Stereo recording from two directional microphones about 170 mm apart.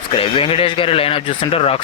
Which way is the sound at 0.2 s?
35° left (ahead or behind).